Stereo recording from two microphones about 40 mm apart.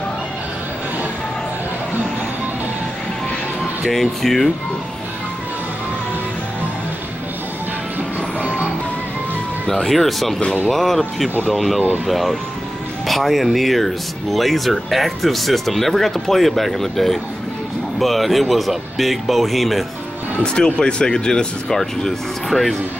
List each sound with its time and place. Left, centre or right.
3.8 s speech: centre
9.7 s speech: centre
20.4 s speech: left
21.6 s speech: centre